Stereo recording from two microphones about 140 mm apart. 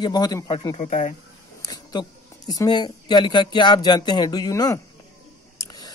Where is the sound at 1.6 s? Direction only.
30° left (ahead or behind).